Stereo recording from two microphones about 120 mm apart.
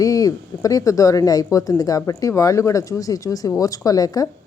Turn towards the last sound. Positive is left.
turn(degrees=30)  # may be behind; listen again after turning